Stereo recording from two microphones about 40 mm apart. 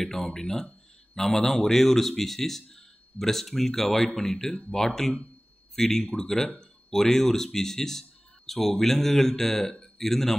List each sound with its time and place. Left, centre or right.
0.0 s a man's voice: centre